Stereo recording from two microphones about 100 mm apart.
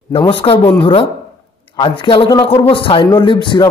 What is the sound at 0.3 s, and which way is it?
Speech, 60° left (ahead or behind).